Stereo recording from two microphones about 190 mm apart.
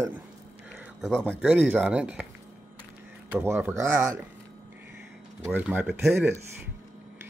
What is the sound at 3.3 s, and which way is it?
Speech, 10° right (ahead or behind).